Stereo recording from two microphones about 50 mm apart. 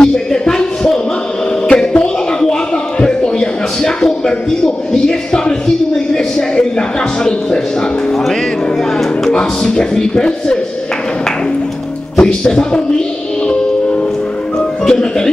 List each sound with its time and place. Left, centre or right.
0.0 s a sound: centre
1.7 s music: centre
3.0 s a sound: centre
8.9 s music: centre
12.2 s speech: centre
14.6 s music: centre